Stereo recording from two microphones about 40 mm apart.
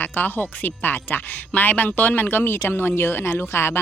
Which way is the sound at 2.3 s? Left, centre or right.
Left.